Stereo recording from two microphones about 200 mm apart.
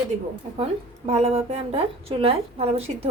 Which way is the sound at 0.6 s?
30° right (ahead or behind).